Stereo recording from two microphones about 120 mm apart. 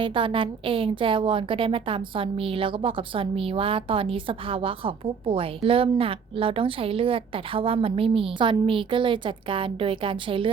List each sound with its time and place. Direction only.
0.0 s a woman's voice: 45° right (ahead or behind)